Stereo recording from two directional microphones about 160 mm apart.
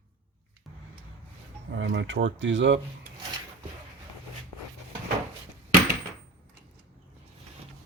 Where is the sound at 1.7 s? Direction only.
90° right.